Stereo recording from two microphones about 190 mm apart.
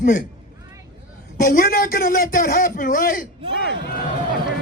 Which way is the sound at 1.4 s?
45° left (ahead or behind).